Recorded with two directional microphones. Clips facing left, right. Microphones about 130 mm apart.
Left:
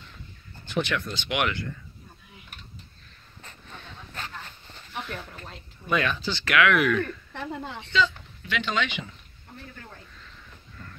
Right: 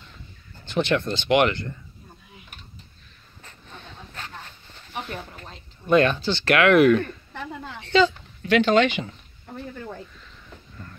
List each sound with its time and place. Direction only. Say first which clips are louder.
0.7 s speech: right 5 dB; 30° right (ahead or behind)
5.9 s speech: right 8 dB; 35° right (ahead or behind)
6.5 s speech: right 6 dB; 40° right (ahead or behind)
7.3 s a sound: even; 20° left (ahead or behind)
7.9 s speech: right 7 dB; 50° right (ahead or behind)